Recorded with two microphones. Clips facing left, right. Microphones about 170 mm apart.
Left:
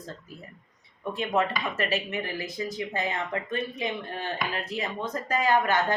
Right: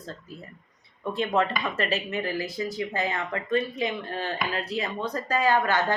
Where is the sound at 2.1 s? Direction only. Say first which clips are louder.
Right 3 dB; 20° left (ahead or behind).